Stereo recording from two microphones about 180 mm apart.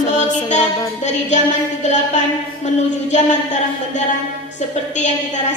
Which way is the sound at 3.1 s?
40° left (ahead or behind).